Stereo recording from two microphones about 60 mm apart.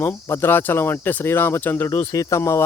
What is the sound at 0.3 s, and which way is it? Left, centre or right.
Speech, left.